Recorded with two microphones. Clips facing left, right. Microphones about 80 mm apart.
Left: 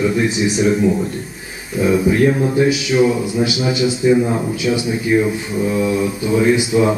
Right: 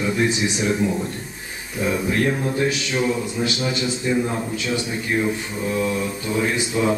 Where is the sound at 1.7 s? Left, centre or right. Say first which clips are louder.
Left 7 dB; centre.